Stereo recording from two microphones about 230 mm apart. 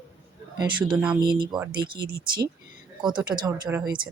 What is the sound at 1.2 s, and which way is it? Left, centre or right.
Speech, centre.